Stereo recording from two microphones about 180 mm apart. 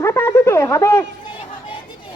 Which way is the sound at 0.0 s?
15° left (ahead or behind).